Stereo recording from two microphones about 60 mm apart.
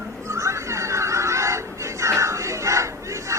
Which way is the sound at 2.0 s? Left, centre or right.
Right.